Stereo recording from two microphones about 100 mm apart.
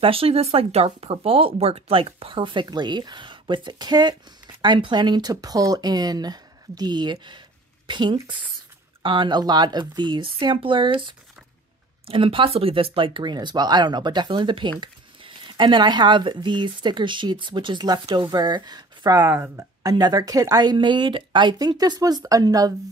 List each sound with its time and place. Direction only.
0.0 s speech: 70° right (ahead or behind); by 1.1 s 90° right
1.2 s speech: 70° right (ahead or behind); by 19.3 s 35° right (ahead or behind)
19.3 s speech: 20° right (ahead or behind)
19.8 s speech: 40° right (ahead or behind)